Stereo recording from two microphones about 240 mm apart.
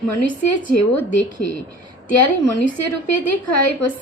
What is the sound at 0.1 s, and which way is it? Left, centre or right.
A woman's voice, left.